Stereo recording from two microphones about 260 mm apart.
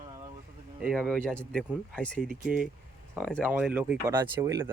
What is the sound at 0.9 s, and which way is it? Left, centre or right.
Speech, centre.